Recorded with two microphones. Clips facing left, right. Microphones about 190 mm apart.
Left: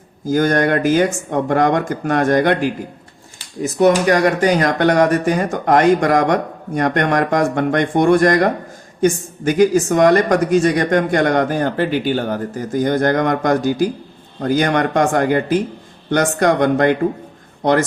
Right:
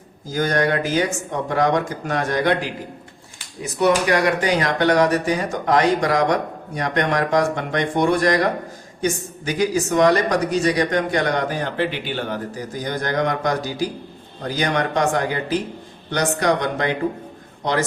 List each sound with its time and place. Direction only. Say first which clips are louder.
0.3 s speech: left 5 dB; 50° left (ahead or behind)